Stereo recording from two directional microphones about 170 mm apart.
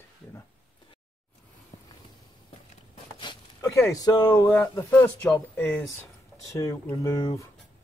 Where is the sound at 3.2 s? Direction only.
25° left (ahead or behind).